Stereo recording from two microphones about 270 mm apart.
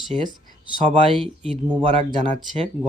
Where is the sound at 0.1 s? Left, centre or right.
Right.